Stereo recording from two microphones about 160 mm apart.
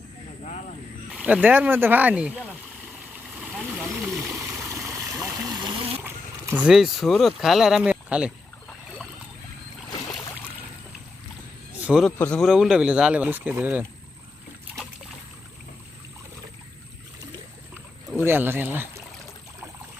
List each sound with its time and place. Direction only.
1.1 s speech: 5° right (ahead or behind)
3.3 s vehicle: centre (ahead or behind)
3.9 s stream: 10° right (ahead or behind)
5.5 s trickle: 30° right (ahead or behind)
6.0 s speech: 15° right (ahead or behind)
11.8 s speech: 5° right (ahead or behind)
12.0 s speech: 10° left (ahead or behind); by 13.8 s 10° right (ahead or behind)
18.1 s speech: 10° right (ahead or behind)